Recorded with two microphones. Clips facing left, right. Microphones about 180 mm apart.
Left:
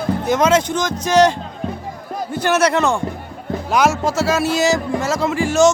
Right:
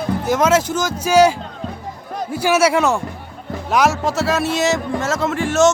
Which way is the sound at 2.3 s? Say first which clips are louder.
Right 1 dB; 10° right (ahead or behind).